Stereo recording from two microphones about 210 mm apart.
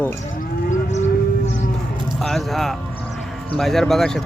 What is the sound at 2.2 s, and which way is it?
Speech, centre (ahead or behind).